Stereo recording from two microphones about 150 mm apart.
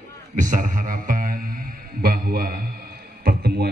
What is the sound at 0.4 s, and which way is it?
Speech, 55° right (ahead or behind).